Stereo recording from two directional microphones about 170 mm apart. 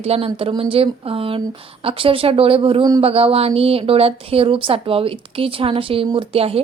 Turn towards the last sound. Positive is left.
turn(degrees=-35)  # may be behind; listen again after turning